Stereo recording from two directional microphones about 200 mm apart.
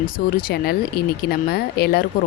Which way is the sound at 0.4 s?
50° left (ahead or behind).